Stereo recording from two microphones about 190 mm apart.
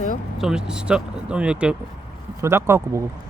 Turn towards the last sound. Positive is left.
turn(degrees=-15)  # may be behind; listen again after turning